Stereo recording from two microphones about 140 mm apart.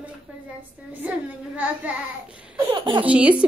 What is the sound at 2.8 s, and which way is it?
Speech, 35° right (ahead or behind).